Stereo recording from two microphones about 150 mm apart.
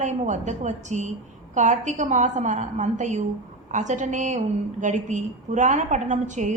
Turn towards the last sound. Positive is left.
turn(degrees=-50)  # may be behind; listen again after turning